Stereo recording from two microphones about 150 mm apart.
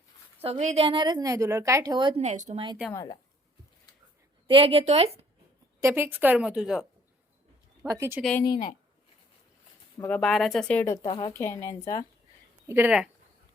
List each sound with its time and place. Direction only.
0.4 s a woman's voice: 50° right (ahead or behind); by 2.2 s 30° right (ahead or behind)
2.2 s speech: 50° right (ahead or behind)
2.9 s speech: 25° left (ahead or behind)
4.4 s a woman's voice: 40° right (ahead or behind)
5.8 s a woman's voice: 15° right (ahead or behind)
7.9 s a woman's voice: 20° right (ahead or behind)
8.4 s a woman's voice: 70° left (ahead or behind)
10.1 s speech: centre (ahead or behind)
11.1 s speech: 30° left (ahead or behind)
11.3 s speech: 20° left (ahead or behind)
12.6 s speech: 15° right (ahead or behind)